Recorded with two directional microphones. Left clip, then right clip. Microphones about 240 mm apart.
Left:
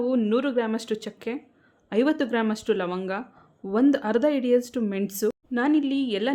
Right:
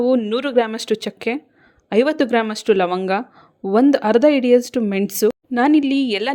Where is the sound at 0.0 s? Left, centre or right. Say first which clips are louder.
Right 6 dB; right.